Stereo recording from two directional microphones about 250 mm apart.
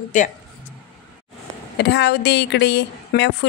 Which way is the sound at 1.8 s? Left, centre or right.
Left.